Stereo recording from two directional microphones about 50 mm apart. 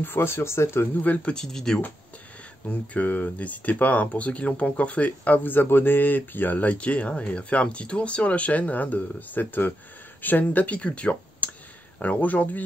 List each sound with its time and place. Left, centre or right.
0.0 s speech: left
1.0 s speech: left
1.3 s speech: centre
2.7 s speech: left